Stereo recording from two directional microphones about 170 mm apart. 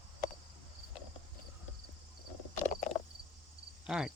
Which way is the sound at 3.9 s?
5° right (ahead or behind).